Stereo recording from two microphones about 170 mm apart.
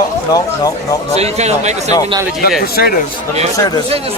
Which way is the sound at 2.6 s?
65° left (ahead or behind).